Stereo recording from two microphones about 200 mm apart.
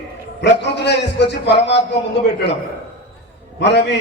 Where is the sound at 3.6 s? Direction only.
60° left (ahead or behind).